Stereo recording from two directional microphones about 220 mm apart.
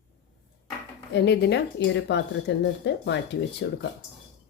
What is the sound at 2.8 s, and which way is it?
Speech, 50° left (ahead or behind).